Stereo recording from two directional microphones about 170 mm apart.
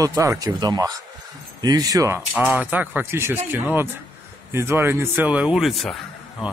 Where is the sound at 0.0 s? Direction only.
20° right (ahead or behind); by 5.9 s centre (ahead or behind).